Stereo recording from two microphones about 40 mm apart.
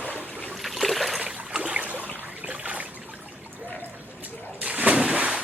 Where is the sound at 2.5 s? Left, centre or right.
Right.